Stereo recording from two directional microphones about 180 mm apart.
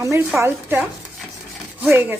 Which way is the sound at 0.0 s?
15° right (ahead or behind).